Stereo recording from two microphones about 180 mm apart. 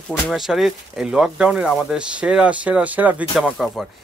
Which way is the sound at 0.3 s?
Centre (ahead or behind).